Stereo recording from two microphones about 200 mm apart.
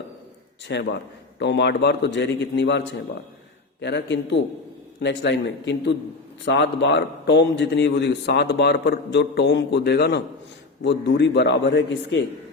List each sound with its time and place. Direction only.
0.7 s a man's voice: 60° left (ahead or behind)